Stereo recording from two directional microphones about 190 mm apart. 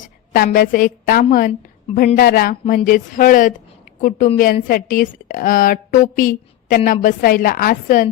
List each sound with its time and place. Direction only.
0.0 s a woman's voice: 45° left (ahead or behind)